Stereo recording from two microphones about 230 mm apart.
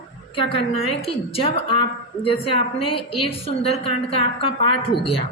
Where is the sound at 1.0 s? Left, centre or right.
Left.